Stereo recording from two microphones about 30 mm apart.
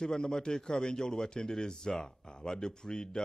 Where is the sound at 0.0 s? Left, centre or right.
Centre.